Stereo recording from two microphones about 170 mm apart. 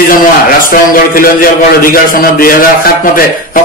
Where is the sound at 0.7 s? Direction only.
55° left (ahead or behind).